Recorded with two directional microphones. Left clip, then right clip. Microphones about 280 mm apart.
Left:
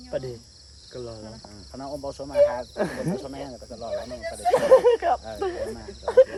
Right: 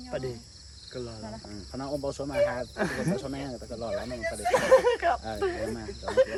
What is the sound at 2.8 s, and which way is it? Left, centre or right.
Speech, left.